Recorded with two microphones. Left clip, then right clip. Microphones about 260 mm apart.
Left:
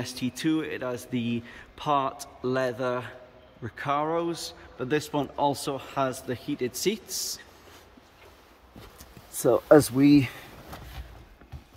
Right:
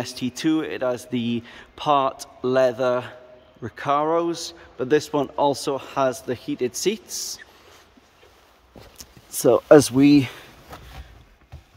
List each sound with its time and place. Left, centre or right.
0.0 s a man's voice: centre
8.9 s speech: right